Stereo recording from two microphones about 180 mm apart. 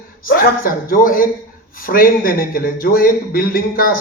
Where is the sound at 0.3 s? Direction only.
55° left (ahead or behind).